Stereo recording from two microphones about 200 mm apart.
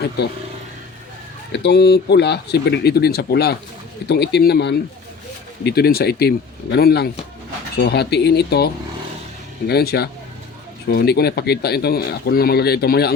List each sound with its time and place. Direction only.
1.5 s speech: 55° left (ahead or behind)